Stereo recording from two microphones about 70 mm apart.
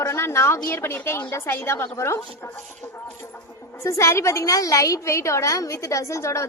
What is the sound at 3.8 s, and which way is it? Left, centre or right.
A woman's voice, left.